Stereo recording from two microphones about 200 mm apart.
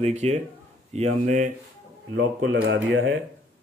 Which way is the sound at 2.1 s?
70° right (ahead or behind).